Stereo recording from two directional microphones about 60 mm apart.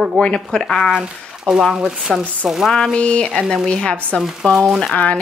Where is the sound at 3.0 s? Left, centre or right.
Left.